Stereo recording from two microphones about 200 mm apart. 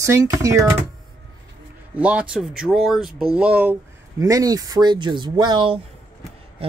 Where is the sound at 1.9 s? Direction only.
5° right (ahead or behind).